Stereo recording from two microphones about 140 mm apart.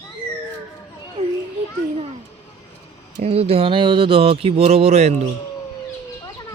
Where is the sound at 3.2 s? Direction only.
45° right (ahead or behind).